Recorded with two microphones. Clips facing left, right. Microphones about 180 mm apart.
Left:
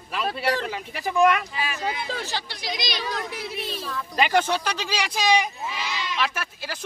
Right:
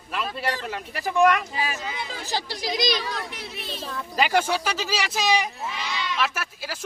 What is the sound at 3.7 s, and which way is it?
Speech, 25° right (ahead or behind).